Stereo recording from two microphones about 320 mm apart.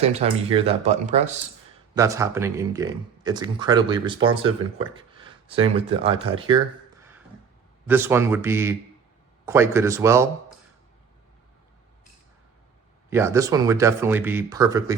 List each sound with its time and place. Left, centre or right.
0.0 s speech: centre
2.0 s speech: centre
7.9 s speech: centre
13.1 s speech: centre